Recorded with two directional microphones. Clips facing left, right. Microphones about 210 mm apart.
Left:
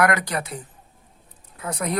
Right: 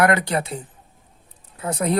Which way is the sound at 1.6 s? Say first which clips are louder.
Right 5 dB; 30° right (ahead or behind).